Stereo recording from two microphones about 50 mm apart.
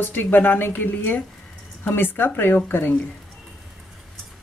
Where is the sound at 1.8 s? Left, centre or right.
Left.